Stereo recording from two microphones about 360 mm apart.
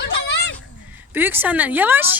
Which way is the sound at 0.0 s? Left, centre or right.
Left.